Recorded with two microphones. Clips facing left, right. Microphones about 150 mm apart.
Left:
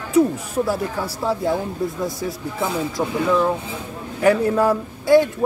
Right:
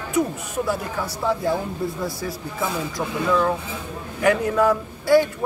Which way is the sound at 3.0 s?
25° left (ahead or behind).